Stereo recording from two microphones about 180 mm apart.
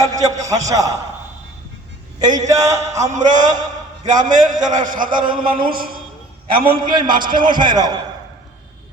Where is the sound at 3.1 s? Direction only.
45° right (ahead or behind).